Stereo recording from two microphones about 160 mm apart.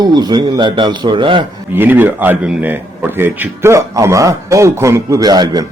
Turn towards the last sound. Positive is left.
turn(degrees=-25)  # may be behind; listen again after turning